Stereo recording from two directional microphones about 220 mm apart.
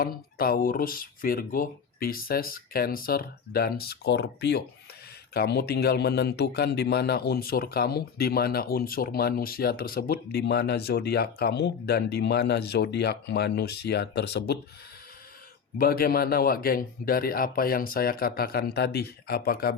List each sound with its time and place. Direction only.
0.0 s speech: 40° left (ahead or behind)
15.8 s speech: 40° left (ahead or behind)